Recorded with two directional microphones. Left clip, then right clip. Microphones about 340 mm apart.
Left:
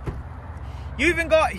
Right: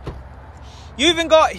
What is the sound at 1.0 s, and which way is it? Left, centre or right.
Speech, centre.